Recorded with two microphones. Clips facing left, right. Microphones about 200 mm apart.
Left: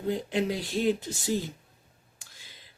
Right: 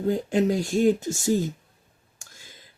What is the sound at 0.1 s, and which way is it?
Speech, 45° right (ahead or behind).